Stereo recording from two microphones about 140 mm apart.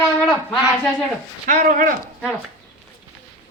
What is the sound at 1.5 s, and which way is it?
Speech, 70° right (ahead or behind).